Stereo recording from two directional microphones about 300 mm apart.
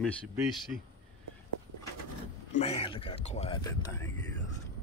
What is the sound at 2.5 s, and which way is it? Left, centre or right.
Speech, centre.